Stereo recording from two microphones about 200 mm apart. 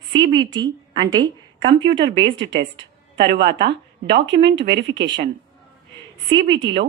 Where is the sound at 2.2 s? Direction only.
60° right (ahead or behind).